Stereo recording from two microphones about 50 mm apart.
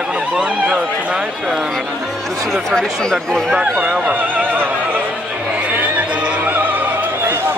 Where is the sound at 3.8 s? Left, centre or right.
Centre.